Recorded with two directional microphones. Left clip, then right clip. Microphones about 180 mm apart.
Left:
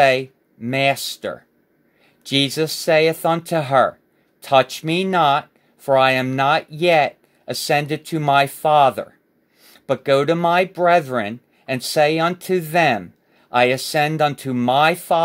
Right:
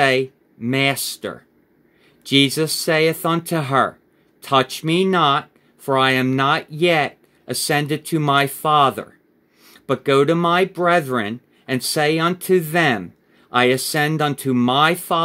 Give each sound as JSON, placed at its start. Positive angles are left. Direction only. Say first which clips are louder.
{"t": 0.0, "sound": "speech", "louder": "left 2 dB", "side_deg": 25}